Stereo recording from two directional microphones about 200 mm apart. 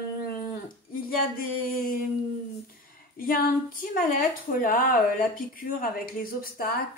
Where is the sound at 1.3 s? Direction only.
45° left (ahead or behind).